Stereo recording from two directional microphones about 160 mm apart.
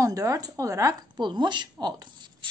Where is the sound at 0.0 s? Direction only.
20° right (ahead or behind).